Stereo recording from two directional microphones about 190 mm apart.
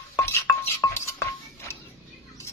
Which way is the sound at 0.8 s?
15° left (ahead or behind).